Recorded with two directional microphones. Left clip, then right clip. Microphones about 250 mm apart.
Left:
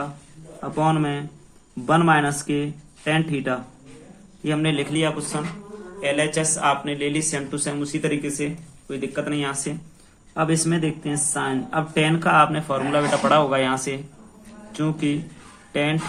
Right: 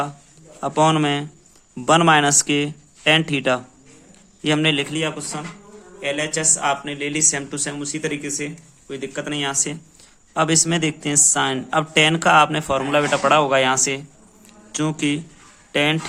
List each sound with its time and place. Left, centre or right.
0.6 s speech: right
10.3 s speech: right